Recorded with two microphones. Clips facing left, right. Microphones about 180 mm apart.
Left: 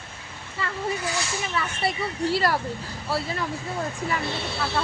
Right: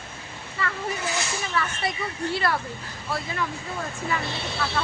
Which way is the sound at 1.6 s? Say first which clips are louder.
Right 2 dB; 25° left (ahead or behind).